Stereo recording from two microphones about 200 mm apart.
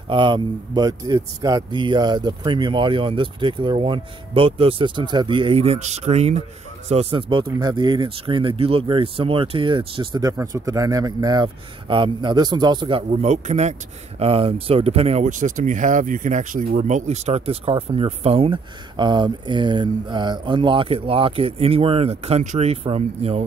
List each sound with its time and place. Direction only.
0.1 s speech: 25° right (ahead or behind)